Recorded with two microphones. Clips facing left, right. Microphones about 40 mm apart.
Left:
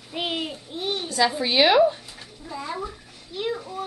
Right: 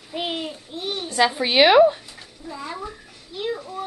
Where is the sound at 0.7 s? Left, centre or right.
Centre.